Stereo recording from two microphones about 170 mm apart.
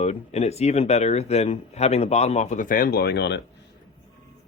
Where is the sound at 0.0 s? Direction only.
40° left (ahead or behind); by 3.4 s 90° left.